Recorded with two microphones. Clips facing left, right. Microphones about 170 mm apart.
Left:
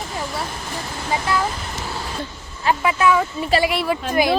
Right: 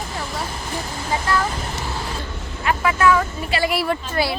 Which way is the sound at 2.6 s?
25° left (ahead or behind).